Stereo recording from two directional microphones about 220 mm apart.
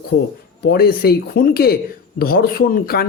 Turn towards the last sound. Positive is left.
turn(degrees=45)  # may be behind; listen again after turning